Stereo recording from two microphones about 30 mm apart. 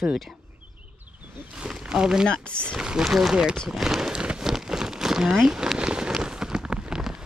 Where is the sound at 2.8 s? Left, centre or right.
Right.